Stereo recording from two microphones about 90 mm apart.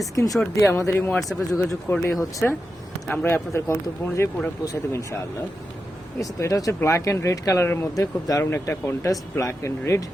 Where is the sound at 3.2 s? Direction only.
25° left (ahead or behind).